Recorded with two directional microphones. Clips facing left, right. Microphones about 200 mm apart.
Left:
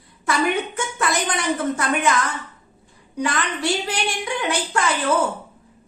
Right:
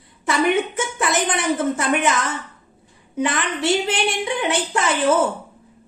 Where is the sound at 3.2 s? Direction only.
25° right (ahead or behind).